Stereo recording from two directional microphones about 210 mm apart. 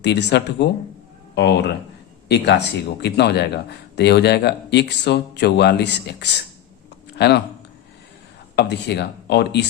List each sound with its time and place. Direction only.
0.0 s speech: 55° left (ahead or behind)
8.5 s speech: 55° left (ahead or behind)